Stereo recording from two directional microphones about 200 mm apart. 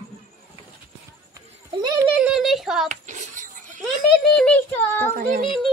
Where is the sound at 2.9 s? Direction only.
40° right (ahead or behind).